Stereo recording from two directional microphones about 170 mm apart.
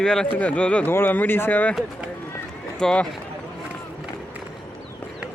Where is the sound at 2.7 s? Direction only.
5° left (ahead or behind).